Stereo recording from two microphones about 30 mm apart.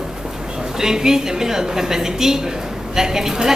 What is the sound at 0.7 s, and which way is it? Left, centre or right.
A woman's voice, centre.